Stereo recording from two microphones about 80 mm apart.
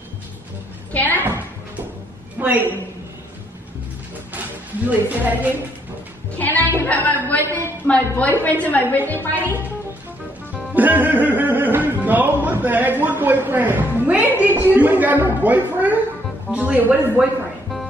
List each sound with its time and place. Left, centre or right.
0.9 s a sound: left
2.3 s a sound: right
4.3 s music: right
5.1 s a woman's voice: right
6.3 s a woman's voice: left
10.5 s music: centre
14.4 s a woman's voice: right